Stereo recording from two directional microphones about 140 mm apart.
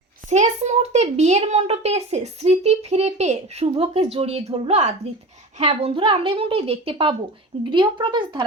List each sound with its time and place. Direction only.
0.3 s a child's voice: 55° right (ahead or behind); by 8.4 s 35° right (ahead or behind)